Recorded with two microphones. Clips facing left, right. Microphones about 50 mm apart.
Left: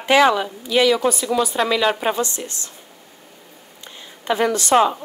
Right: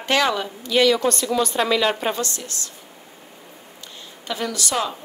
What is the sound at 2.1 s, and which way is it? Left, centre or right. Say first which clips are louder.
Speech: left 4 dB; left.